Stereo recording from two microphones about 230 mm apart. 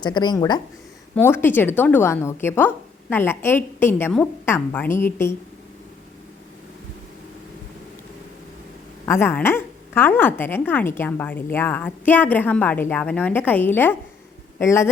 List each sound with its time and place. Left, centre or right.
0.0 s a woman's voice: centre
9.0 s a woman's voice: centre